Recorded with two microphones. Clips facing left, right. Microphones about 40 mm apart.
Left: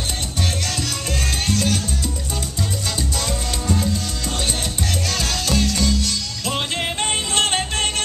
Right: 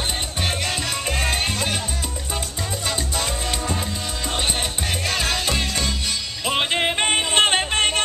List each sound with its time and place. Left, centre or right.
1.2 s music: right
3.2 s salsa music: centre
5.0 s music: centre